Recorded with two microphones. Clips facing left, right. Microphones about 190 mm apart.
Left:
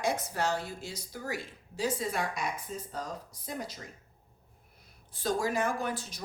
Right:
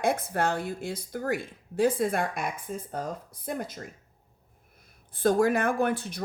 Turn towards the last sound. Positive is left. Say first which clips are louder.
# right 7 dB
turn(degrees=-60)  # may be behind; listen again after turning